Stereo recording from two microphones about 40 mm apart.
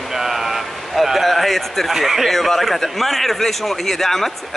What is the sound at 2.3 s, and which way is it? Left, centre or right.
A man's voice, centre.